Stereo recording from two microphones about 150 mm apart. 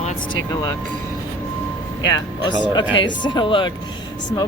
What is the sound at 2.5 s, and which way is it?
Speech, 30° left (ahead or behind).